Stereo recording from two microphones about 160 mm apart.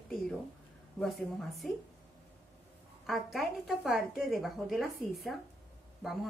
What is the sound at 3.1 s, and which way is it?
Speech, centre (ahead or behind).